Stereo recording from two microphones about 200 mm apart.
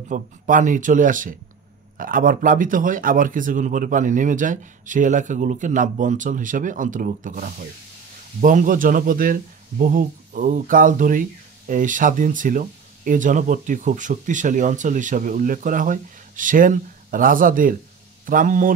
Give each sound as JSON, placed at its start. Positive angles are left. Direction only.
{"t": 0.1, "sound": "speech", "side_deg": -40}